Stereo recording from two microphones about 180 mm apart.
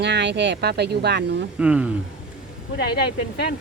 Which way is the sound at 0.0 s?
75° right (ahead or behind).